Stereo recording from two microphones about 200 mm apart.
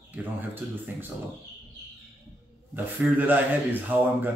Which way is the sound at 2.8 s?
10° right (ahead or behind).